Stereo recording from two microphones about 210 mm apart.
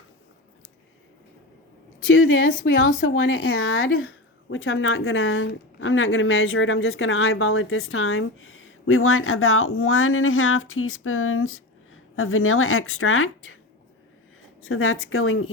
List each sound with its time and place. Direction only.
2.0 s a woman's voice: 75° left (ahead or behind)
2.5 s speech: 55° left (ahead or behind); by 13.6 s 75° left (ahead or behind)
14.6 s speech: 75° left (ahead or behind)